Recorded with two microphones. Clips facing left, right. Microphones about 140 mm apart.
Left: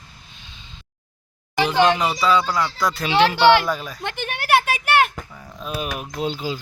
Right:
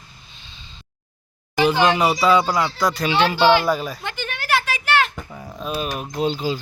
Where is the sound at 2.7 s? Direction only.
Centre (ahead or behind).